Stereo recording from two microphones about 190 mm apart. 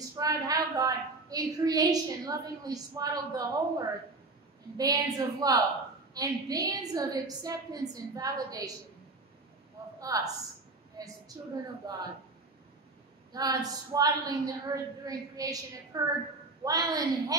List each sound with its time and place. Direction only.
0.2 s a woman's voice: 20° right (ahead or behind)
9.9 s a woman's voice: 20° right (ahead or behind)
11.4 s a woman's voice: 20° right (ahead or behind)
13.3 s a woman's voice: 20° right (ahead or behind)